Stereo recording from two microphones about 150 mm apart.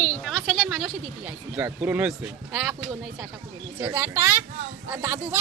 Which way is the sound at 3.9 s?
15° right (ahead or behind).